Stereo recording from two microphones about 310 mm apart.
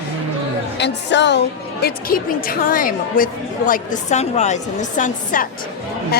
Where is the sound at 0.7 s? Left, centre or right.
Left.